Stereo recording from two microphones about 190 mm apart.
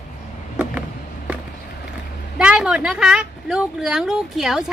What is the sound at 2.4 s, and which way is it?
A woman's voice, 5° right (ahead or behind).